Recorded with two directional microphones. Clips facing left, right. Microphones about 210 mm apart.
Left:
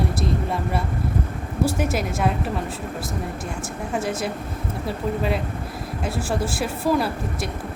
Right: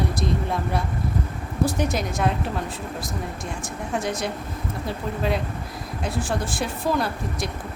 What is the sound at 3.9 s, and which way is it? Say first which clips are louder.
Speech: left 1 dB; 5° left (ahead or behind).